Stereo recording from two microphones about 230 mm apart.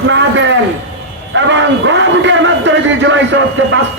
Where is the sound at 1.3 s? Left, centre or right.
Right.